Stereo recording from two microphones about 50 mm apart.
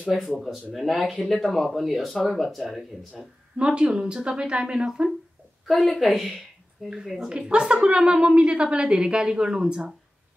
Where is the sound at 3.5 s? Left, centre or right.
Centre.